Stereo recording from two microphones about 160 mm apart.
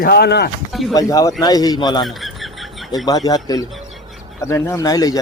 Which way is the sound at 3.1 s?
25° left (ahead or behind).